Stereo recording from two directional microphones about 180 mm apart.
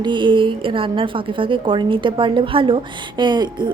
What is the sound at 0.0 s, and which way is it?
A woman's voice, 25° right (ahead or behind).